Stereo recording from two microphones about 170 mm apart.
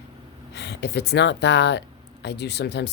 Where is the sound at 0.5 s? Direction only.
80° left.